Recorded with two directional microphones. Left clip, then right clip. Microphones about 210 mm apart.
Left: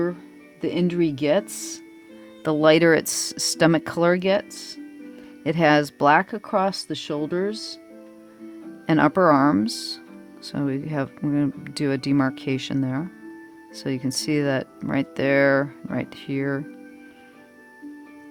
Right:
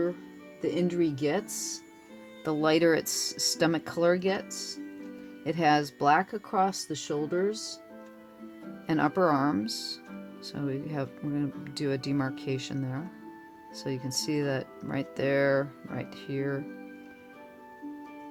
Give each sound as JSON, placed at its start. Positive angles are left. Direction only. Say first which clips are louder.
{"t": 0.6, "sound": "speech", "louder": "left 5 dB", "side_deg": 50}
{"t": 8.9, "sound": "speech", "louder": "left 8 dB", "side_deg": 40}